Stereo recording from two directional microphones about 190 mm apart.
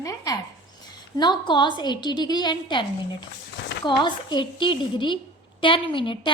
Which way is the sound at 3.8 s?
25° left (ahead or behind).